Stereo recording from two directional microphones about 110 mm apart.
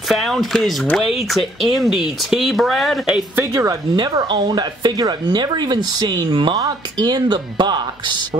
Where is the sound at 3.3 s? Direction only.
30° right (ahead or behind).